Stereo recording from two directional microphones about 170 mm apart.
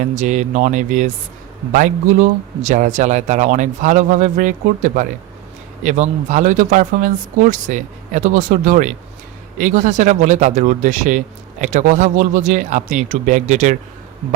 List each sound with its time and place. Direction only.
0.0 s a man's voice: 45° right (ahead or behind)